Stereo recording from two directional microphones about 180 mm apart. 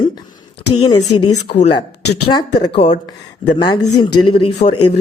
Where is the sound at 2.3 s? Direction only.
20° left (ahead or behind).